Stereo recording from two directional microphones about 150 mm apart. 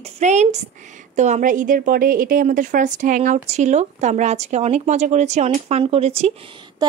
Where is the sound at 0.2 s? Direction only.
50° right (ahead or behind).